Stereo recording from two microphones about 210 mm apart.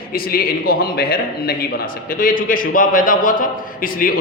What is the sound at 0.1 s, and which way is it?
A man's voice, 45° left (ahead or behind).